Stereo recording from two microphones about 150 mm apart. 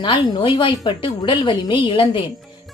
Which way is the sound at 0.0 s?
35° left (ahead or behind).